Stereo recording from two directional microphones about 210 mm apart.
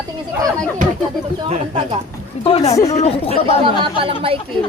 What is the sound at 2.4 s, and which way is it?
Speech, 30° left (ahead or behind).